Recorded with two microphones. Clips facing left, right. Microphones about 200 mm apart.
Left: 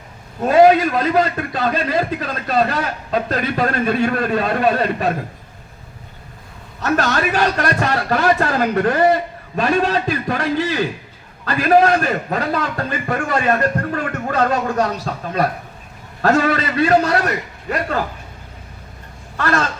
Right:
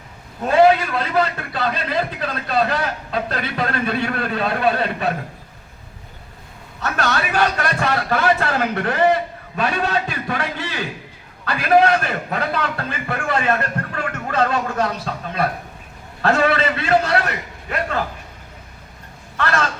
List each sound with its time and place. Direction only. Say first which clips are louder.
0.4 s a man's voice: left 3 dB; 40° left (ahead or behind)
6.8 s a man's voice: left 4 dB; 40° left (ahead or behind)
19.4 s a man's voice: left 2 dB; 40° left (ahead or behind)